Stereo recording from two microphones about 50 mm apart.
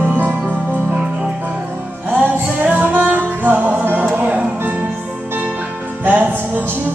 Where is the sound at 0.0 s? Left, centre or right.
Right.